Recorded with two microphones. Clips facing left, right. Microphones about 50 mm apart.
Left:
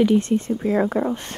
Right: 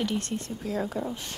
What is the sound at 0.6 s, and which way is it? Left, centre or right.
Speech, left.